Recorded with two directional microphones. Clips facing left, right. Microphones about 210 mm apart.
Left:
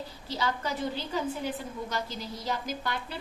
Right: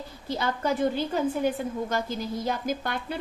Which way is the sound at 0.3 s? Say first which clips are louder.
Right 5 dB; 50° right (ahead or behind).